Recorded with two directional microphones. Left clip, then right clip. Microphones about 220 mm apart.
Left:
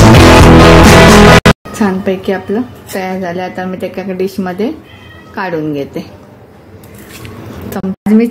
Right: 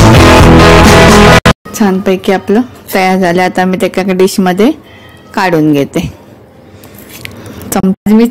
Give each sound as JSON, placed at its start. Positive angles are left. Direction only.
{"t": 0.0, "sound": "music", "side_deg": 0}
{"t": 1.7, "sound": "a woman's voice", "side_deg": -30}
{"t": 7.2, "sound": "a sound", "side_deg": -35}